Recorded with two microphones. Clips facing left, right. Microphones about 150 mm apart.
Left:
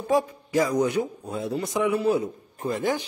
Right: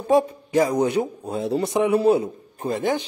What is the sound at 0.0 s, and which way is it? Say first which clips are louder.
A man's voice: right 5 dB; 25° right (ahead or behind).